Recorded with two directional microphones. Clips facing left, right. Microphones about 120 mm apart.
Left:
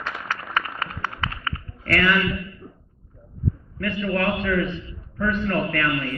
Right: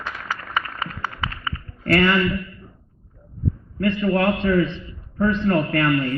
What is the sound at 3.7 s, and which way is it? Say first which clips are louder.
A man's voice: right 5 dB; 30° right (ahead or behind).